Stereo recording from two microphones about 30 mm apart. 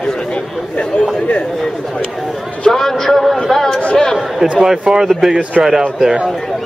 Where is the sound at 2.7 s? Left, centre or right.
Centre.